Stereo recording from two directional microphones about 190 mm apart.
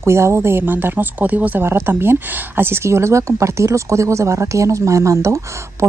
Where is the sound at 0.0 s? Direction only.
15° right (ahead or behind).